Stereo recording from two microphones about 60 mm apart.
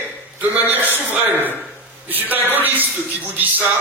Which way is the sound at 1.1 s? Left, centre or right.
Right.